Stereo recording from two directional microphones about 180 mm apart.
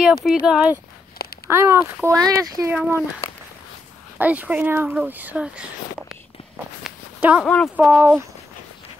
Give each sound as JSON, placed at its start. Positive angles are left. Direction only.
{"t": 0.0, "sound": "speech", "side_deg": 0}
{"t": 1.1, "sound": "a sound", "side_deg": 60}
{"t": 1.5, "sound": "speech", "side_deg": -15}
{"t": 2.7, "sound": "speech", "side_deg": -10}
{"t": 4.2, "sound": "speech", "side_deg": -10}
{"t": 6.8, "sound": "a sound", "side_deg": -5}
{"t": 7.4, "sound": "speech", "side_deg": 5}
{"t": 7.7, "sound": "speech", "side_deg": -5}